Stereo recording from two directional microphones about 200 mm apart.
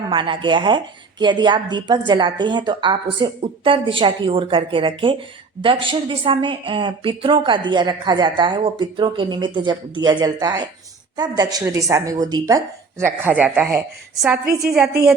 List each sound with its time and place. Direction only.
0.1 s a woman's voice: 25° right (ahead or behind); by 14.3 s 5° right (ahead or behind)